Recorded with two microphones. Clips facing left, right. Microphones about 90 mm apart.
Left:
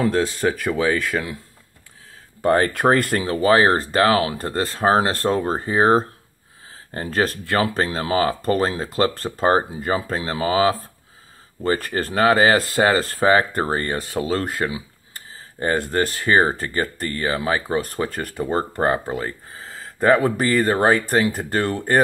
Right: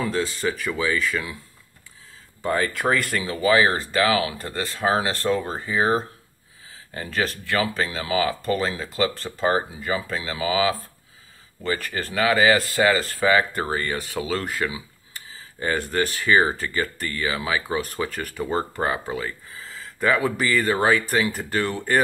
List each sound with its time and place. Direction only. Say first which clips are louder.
0.0 s speech: left 5 dB; 50° left (ahead or behind)
2.4 s speech: left 6 dB; 50° left (ahead or behind)